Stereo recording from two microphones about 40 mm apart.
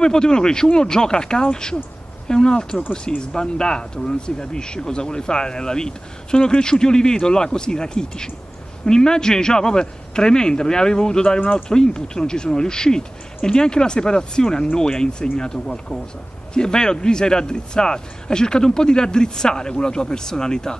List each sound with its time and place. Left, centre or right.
0.0 s speech: centre